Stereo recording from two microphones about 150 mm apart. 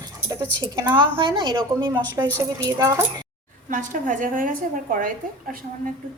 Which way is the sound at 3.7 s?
60° right (ahead or behind).